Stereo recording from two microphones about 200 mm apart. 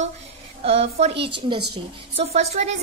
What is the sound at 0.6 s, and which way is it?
A woman's voice, 30° right (ahead or behind).